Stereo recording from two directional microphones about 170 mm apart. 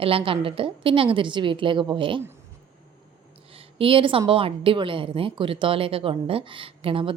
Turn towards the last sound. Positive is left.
turn(degrees=-30)  # may be behind; listen again after turning